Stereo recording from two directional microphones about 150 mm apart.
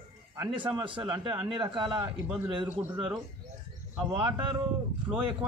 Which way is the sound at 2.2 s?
15° right (ahead or behind).